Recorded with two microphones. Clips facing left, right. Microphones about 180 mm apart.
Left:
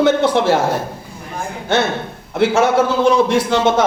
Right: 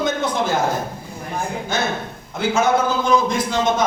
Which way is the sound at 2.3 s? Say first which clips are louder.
Left 4 dB; 75° left (ahead or behind).